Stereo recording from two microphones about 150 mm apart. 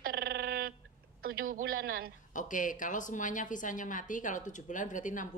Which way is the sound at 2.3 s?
60° left (ahead or behind).